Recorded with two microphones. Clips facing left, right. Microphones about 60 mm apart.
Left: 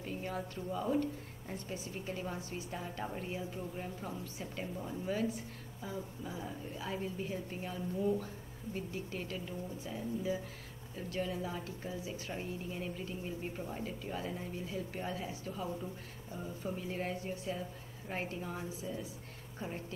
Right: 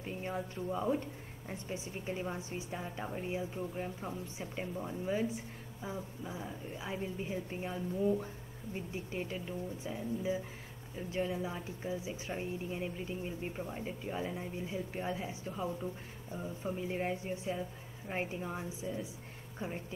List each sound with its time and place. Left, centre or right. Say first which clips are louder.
0.0 s speech: right 1 dB; right